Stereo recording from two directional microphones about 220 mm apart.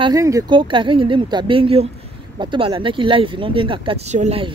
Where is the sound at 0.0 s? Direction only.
15° right (ahead or behind).